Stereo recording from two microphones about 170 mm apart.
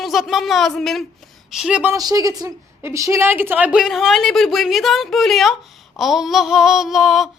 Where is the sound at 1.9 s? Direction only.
20° right (ahead or behind); by 7.3 s centre (ahead or behind).